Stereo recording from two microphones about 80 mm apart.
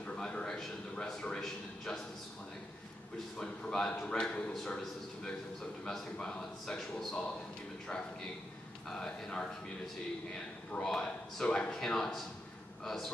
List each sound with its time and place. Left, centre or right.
0.0 s a sound: centre
1.0 s speech: centre
3.3 s speech: centre
5.9 s speech: centre
8.8 s speech: centre
10.7 s speech: centre